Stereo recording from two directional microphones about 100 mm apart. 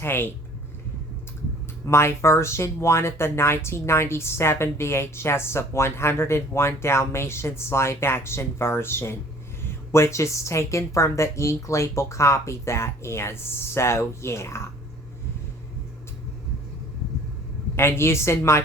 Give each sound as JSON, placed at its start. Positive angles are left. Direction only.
{"t": 0.0, "sound": "speech", "side_deg": 20}
{"t": 1.9, "sound": "speech", "side_deg": 25}
{"t": 17.7, "sound": "speech", "side_deg": 25}